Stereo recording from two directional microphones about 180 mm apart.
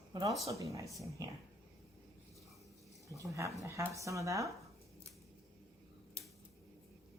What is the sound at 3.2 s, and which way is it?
Speech, 15° right (ahead or behind).